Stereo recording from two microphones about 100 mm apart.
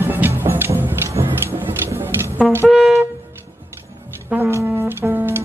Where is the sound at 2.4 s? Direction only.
Centre (ahead or behind).